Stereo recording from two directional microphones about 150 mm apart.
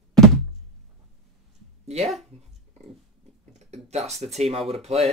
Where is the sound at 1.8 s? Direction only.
45° right (ahead or behind).